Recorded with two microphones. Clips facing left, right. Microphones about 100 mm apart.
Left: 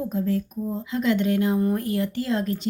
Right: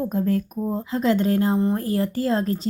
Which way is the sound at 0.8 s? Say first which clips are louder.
Right 2 dB; 35° right (ahead or behind).